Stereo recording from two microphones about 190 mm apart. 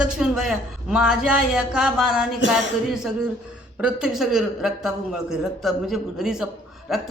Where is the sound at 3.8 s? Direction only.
5° right (ahead or behind).